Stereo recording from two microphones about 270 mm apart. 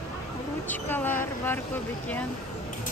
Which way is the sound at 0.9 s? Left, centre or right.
Centre.